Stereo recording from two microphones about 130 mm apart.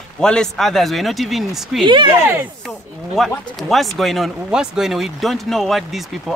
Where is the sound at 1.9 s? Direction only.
35° right (ahead or behind).